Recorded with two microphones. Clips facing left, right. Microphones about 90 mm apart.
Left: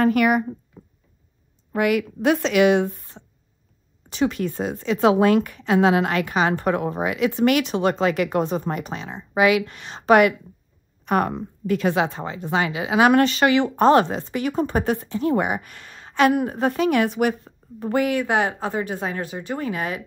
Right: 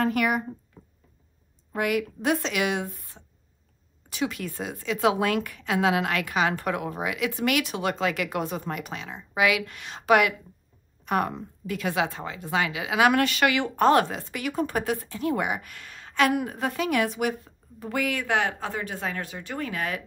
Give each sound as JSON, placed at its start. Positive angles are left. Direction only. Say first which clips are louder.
{"t": 0.0, "sound": "speech", "louder": "left 6 dB", "side_deg": 60}
{"t": 1.7, "sound": "a woman's voice", "louder": "left 5 dB", "side_deg": 65}
{"t": 2.4, "sound": "speech", "louder": "left 10 dB", "side_deg": 55}
{"t": 3.2, "sound": "a sound", "louder": "left 7 dB", "side_deg": 30}
{"t": 4.1, "sound": "a woman's voice", "louder": "left 7 dB", "side_deg": 40}
{"t": 17.5, "sound": "a woman's voice", "louder": "left 9 dB", "side_deg": 35}
{"t": 18.1, "sound": "speech", "louder": "left 5 dB", "side_deg": 20}